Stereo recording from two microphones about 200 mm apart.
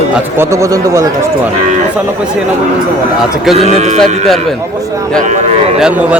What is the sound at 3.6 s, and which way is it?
Speech, 35° right (ahead or behind).